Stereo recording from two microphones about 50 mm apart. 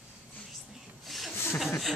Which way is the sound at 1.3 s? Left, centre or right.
Left.